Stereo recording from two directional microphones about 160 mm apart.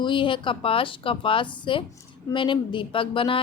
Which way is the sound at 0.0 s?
30° left (ahead or behind).